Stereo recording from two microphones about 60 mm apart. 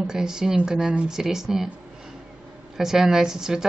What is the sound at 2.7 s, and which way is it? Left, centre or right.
Speech, centre.